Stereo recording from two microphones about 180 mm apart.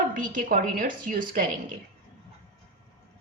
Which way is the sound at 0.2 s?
50° right (ahead or behind).